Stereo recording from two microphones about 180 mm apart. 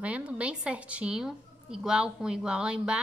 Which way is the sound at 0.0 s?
5° right (ahead or behind).